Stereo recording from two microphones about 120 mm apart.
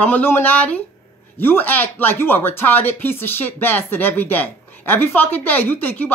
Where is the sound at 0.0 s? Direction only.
15° left (ahead or behind).